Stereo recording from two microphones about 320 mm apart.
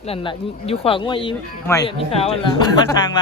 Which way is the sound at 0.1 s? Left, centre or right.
Centre.